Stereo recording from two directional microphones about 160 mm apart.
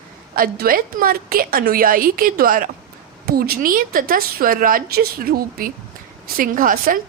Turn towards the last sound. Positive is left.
turn(degrees=-60)  # may be behind; listen again after turning